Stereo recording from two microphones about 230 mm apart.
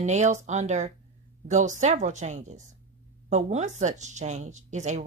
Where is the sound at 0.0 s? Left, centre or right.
Right.